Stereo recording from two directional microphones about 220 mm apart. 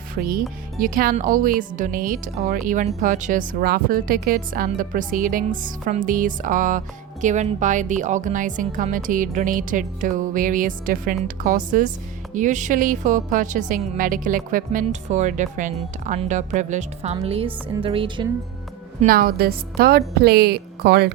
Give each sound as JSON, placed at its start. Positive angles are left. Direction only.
{"t": 0.1, "sound": "speech", "side_deg": -40}
{"t": 19.0, "sound": "a woman's voice", "side_deg": -40}